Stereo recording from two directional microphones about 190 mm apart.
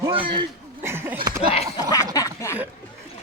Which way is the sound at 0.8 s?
10° right (ahead or behind).